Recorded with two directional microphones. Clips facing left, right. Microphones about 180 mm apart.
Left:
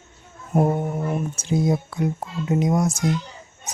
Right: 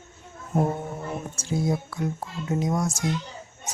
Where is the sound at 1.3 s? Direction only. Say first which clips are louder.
Left 2 dB; 20° left (ahead or behind).